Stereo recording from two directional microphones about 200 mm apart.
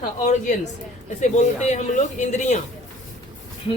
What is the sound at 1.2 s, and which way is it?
A man's voice, 35° left (ahead or behind).